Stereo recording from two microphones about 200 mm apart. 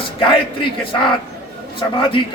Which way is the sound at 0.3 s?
25° left (ahead or behind).